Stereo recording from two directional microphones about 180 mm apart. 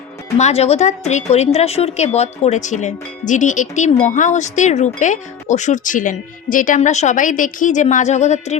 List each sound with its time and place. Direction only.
0.3 s a woman's voice: 40° left (ahead or behind)